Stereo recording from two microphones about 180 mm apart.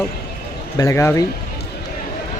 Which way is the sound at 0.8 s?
15° left (ahead or behind).